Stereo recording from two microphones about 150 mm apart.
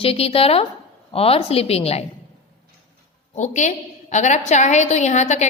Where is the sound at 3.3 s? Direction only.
55° left (ahead or behind).